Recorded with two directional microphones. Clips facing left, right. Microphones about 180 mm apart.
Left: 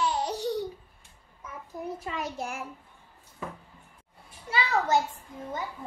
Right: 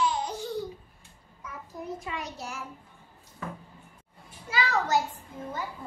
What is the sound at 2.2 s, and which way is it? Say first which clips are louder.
Speech: left 4 dB; 55° left (ahead or behind).